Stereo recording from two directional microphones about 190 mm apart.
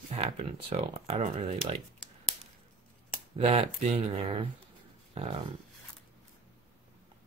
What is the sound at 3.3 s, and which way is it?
Speech, 35° right (ahead or behind).